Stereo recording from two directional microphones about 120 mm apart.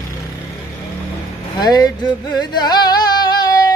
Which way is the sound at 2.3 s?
35° left (ahead or behind).